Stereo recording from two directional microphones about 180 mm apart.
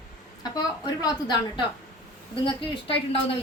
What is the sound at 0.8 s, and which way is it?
A woman's voice, 20° left (ahead or behind).